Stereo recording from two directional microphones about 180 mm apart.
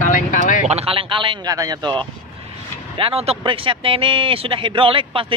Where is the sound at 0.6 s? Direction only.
35° right (ahead or behind).